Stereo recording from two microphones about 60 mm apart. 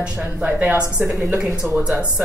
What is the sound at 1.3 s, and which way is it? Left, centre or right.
Speech, centre.